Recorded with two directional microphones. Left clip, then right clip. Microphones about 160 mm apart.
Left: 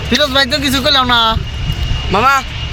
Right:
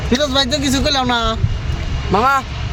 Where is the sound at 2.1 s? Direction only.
60° right (ahead or behind).